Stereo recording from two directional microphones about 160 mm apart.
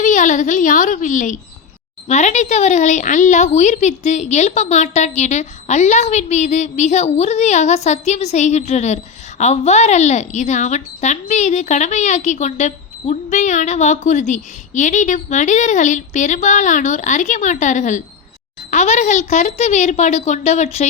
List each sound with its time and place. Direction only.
0.0 s a woman's voice: 55° left (ahead or behind)